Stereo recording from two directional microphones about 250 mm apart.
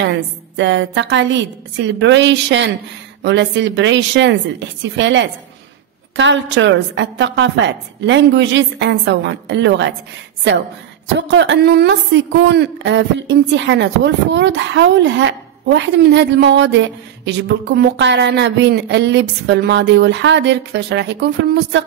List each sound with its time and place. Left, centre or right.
0.0 s a woman's voice: right
11.1 s a woman's voice: right